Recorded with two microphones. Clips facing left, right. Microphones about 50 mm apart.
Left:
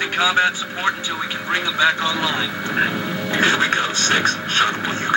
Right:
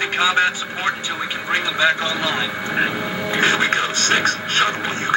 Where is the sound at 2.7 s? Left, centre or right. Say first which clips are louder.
Left 1 dB; centre.